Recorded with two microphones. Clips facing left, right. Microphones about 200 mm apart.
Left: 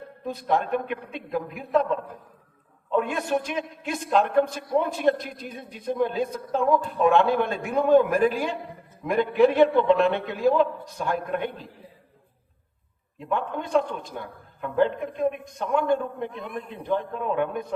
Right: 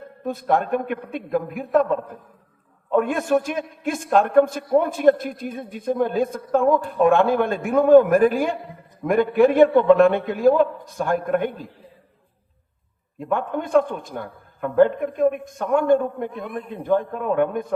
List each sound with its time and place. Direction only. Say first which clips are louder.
0.3 s a man's voice: right 3 dB; 50° right (ahead or behind)
13.1 s a man's voice: right 4 dB; 50° right (ahead or behind)